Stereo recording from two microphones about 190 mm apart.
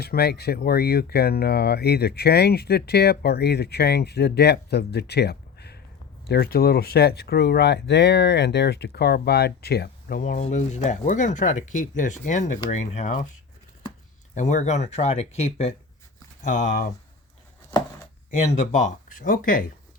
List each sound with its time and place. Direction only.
0.0 s speech: 55° left (ahead or behind); by 13.2 s 40° left (ahead or behind)
14.3 s speech: 40° left (ahead or behind)
18.3 s speech: 35° left (ahead or behind)